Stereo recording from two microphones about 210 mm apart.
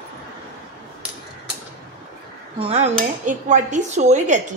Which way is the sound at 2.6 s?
30° right (ahead or behind).